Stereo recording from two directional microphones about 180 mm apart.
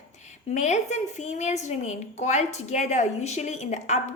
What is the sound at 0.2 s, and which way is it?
A woman's voice, 40° left (ahead or behind).